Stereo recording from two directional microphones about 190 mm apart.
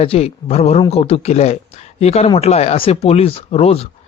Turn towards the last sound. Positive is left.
turn(degrees=30)  # may be behind; listen again after turning